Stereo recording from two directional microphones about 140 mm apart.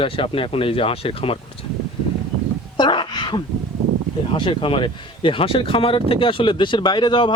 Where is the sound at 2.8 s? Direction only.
35° left (ahead or behind).